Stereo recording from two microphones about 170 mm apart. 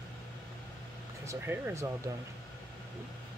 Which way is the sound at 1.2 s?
15° right (ahead or behind).